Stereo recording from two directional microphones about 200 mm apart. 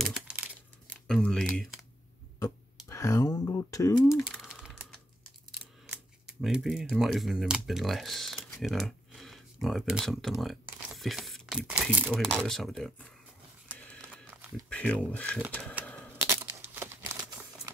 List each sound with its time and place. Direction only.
0.0 s crumpling: 5° right (ahead or behind)
1.0 s a sound: 5° left (ahead or behind)
2.3 s a sound: 15° left (ahead or behind)
4.3 s typing: centre (ahead or behind)
6.2 s speech: centre (ahead or behind)
14.7 s speech: 5° left (ahead or behind)
16.2 s crumpling: 10° right (ahead or behind)